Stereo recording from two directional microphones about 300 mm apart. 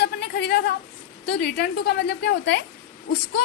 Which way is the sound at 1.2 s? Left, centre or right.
Left.